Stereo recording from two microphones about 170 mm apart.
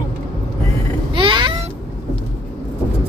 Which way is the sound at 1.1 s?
30° right (ahead or behind).